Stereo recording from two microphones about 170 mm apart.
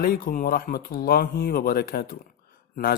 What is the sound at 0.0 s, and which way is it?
A man's voice, 55° left (ahead or behind).